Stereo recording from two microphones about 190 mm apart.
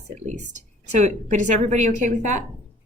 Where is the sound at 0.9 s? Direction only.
35° right (ahead or behind).